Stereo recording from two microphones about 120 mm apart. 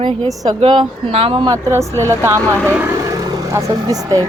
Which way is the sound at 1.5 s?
25° right (ahead or behind).